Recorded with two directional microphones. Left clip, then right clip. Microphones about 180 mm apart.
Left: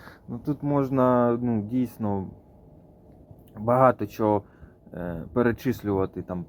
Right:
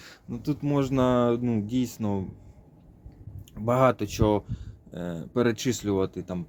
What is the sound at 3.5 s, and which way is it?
Speech, 35° right (ahead or behind).